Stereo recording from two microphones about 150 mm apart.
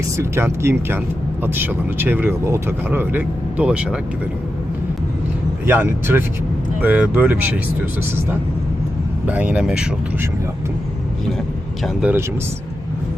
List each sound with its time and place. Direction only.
0.2 s speech: 15° right (ahead or behind)
5.6 s speech: 15° right (ahead or behind)
11.8 s speech: 5° right (ahead or behind)